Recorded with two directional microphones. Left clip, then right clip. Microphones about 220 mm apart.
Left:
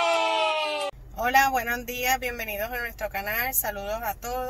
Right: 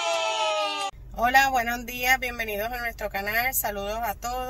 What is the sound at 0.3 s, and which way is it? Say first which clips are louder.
Speech: left 1 dB; 10° right (ahead or behind).